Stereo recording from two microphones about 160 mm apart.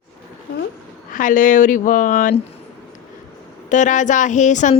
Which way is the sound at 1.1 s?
55° left (ahead or behind).